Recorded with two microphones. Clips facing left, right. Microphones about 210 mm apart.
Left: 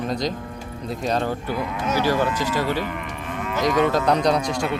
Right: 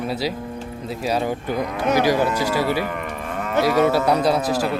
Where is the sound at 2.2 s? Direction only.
40° right (ahead or behind).